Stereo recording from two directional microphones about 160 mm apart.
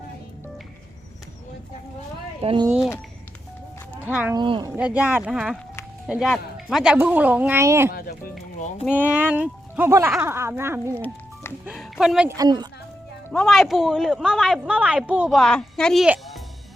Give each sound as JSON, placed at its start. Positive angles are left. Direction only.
{"t": 2.4, "sound": "speech", "side_deg": -35}
{"t": 2.6, "sound": "speech", "side_deg": -5}
{"t": 3.9, "sound": "speech", "side_deg": -10}
{"t": 4.4, "sound": "speech", "side_deg": -30}
{"t": 4.8, "sound": "speech", "side_deg": -5}
{"t": 7.9, "sound": "speech", "side_deg": 65}
{"t": 8.8, "sound": "speech", "side_deg": -10}
{"t": 11.6, "sound": "speech", "side_deg": -5}
{"t": 12.4, "sound": "speech", "side_deg": -25}
{"t": 13.3, "sound": "speech", "side_deg": 0}
{"t": 16.0, "sound": "music", "side_deg": -5}